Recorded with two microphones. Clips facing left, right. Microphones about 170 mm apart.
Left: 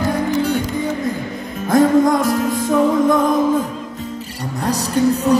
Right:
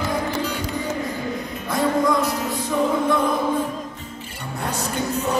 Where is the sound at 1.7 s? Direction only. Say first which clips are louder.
Left 7 dB; 45° left (ahead or behind).